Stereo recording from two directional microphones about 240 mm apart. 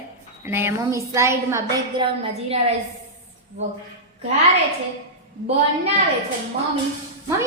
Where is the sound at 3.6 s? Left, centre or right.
Right.